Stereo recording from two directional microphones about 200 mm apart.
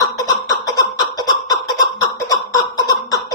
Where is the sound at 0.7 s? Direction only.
20° left (ahead or behind).